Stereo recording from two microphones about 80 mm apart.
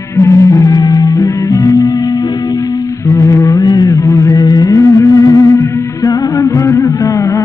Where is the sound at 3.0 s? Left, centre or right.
Left.